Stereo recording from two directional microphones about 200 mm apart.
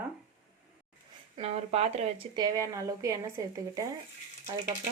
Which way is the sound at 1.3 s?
30° right (ahead or behind).